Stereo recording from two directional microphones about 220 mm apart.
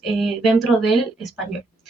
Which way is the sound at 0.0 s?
Centre (ahead or behind).